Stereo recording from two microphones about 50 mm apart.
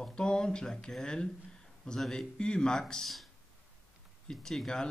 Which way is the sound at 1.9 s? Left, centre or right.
Centre.